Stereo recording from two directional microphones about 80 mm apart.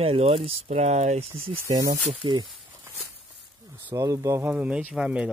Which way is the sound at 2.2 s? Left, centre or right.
Right.